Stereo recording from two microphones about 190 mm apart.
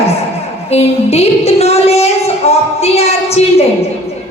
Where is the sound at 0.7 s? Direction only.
35° left (ahead or behind).